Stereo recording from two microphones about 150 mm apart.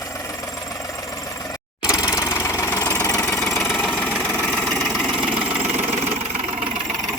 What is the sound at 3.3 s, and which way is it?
Engine, centre (ahead or behind).